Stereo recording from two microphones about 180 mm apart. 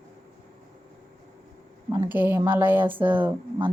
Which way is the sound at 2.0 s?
10° right (ahead or behind).